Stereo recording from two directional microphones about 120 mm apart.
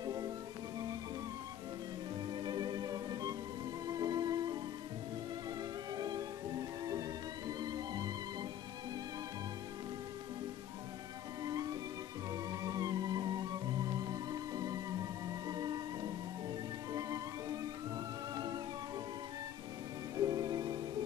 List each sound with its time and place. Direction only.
0.0 s music: 30° right (ahead or behind)
2.3 s music: 35° right (ahead or behind)
5.9 s music: 35° right (ahead or behind)
11.4 s music: 30° right (ahead or behind)
20.2 s music: 30° right (ahead or behind)